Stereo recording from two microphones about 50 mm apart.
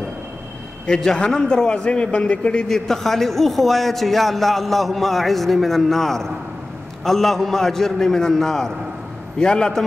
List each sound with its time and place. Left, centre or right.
0.8 s a man's voice: centre
2.7 s a man's voice: centre